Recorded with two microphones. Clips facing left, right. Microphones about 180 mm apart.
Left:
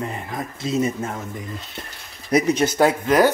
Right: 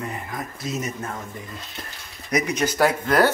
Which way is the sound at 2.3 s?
30° left (ahead or behind).